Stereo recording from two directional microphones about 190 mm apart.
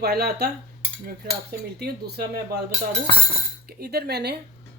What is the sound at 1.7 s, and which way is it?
Speech, 55° right (ahead or behind).